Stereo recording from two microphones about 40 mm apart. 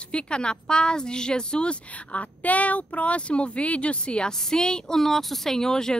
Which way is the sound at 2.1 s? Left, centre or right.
Left.